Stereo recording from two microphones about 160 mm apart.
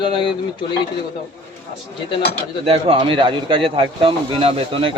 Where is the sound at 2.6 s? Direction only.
35° right (ahead or behind).